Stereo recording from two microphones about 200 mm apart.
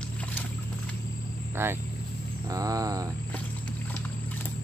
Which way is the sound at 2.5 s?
15° right (ahead or behind).